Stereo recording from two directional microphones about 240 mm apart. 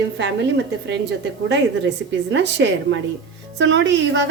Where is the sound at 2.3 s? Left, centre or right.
Right.